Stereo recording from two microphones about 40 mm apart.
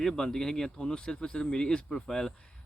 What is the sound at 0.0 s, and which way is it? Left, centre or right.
Speech, centre.